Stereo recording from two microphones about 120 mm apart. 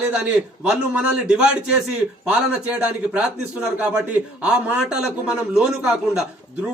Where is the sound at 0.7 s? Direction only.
5° right (ahead or behind).